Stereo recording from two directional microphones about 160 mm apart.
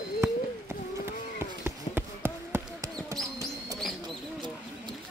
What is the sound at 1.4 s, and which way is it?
Basketball bounce, 15° right (ahead or behind).